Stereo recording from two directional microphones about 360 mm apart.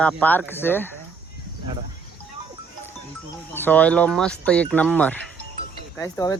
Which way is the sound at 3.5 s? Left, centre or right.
Centre.